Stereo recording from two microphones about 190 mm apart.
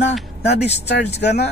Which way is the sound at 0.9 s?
65° left (ahead or behind).